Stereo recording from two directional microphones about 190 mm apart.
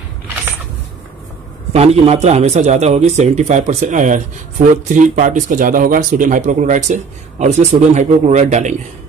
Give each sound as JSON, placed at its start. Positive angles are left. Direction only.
{"t": 1.7, "sound": "speech", "side_deg": -35}